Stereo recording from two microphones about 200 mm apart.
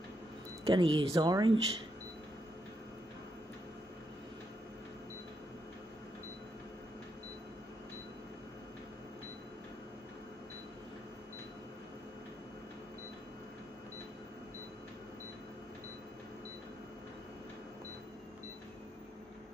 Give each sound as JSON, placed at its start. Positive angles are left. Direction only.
{"t": 0.7, "sound": "speech", "side_deg": -25}